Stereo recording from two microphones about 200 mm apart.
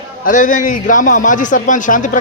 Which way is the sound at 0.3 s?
40° left (ahead or behind).